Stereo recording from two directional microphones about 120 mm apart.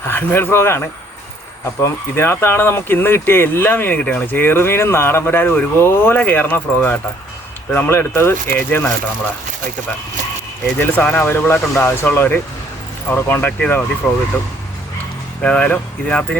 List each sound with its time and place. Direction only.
0.1 s speech: 15° left (ahead or behind)
10.8 s speech: 15° left (ahead or behind)
15.4 s speech: 10° left (ahead or behind)